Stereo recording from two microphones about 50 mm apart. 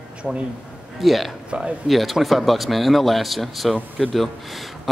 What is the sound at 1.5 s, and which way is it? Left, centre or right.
Speech, right.